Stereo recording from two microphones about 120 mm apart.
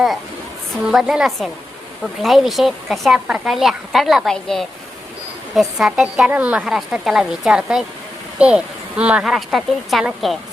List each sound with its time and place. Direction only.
0.9 s a woman's voice: 5° right (ahead or behind)